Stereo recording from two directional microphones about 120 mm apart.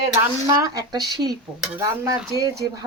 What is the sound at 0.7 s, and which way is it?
Speech, 35° right (ahead or behind).